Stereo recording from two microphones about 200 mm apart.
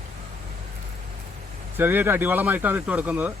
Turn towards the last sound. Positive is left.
turn(degrees=-10)  # may be behind; listen again after turning